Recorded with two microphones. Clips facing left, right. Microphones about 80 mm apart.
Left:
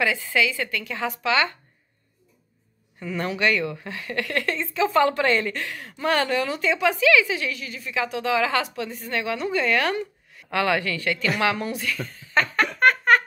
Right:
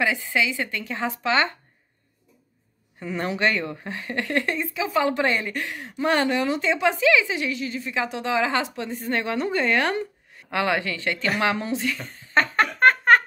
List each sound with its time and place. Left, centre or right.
0.0 s speech: right
3.1 s a woman's voice: right